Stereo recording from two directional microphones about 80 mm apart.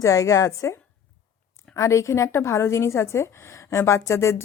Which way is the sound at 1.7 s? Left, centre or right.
Left.